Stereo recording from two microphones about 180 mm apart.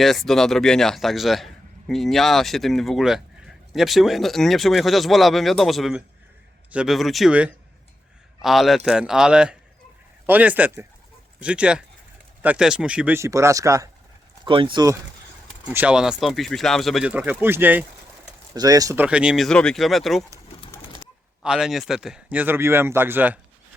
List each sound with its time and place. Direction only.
0.0 s speech: centre (ahead or behind); by 13.9 s 20° right (ahead or behind)
14.4 s speech: 30° right (ahead or behind)
15.7 s speech: 5° right (ahead or behind)
18.5 s speech: 20° right (ahead or behind)
19.0 s speech: 5° right (ahead or behind)
21.4 s speech: 5° right (ahead or behind)